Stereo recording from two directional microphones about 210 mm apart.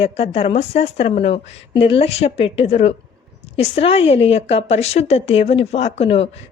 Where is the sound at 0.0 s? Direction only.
30° left (ahead or behind).